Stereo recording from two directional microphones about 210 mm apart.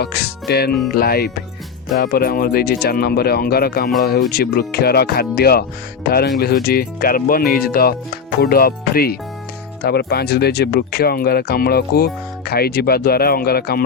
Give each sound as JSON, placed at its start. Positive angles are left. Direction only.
{"t": 0.0, "sound": "speech", "side_deg": 50}